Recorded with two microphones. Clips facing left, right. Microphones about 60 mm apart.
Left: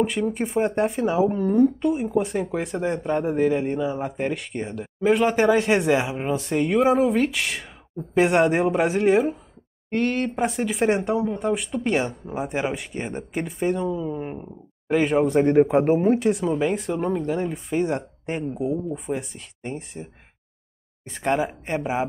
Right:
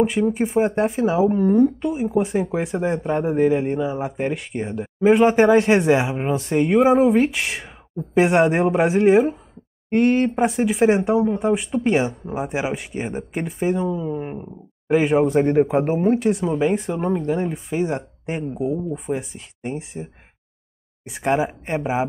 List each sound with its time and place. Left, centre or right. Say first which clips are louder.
0.0 s speech: right 4 dB; centre
9.8 s speech: right 6 dB; centre
10.5 s speech: right 5 dB; centre